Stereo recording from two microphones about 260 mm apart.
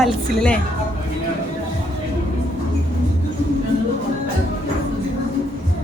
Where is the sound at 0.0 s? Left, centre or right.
Centre.